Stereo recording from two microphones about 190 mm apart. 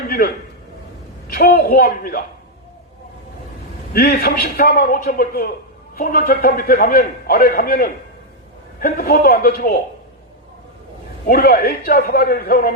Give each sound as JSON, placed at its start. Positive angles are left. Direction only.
{"t": 1.3, "sound": "a man's voice", "side_deg": 50}
{"t": 3.9, "sound": "a man's voice", "side_deg": 55}
{"t": 11.3, "sound": "a man's voice", "side_deg": 50}